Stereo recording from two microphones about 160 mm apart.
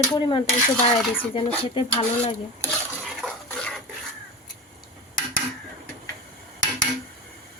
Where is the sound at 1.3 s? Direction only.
30° left (ahead or behind).